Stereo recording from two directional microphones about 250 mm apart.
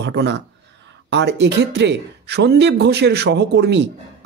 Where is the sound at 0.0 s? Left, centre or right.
Right.